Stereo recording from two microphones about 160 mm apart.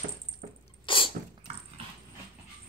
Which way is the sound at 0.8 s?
30° left (ahead or behind).